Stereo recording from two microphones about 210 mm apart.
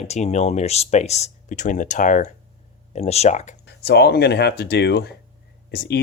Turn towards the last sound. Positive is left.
turn(degrees=45)  # may be behind; listen again after turning